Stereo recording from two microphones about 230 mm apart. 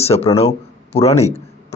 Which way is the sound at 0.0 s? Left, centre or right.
Left.